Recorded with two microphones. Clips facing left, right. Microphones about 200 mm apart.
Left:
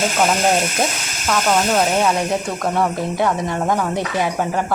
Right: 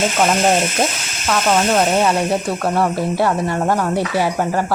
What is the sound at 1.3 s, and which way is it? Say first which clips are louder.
Speech: right 1 dB; 5° right (ahead or behind).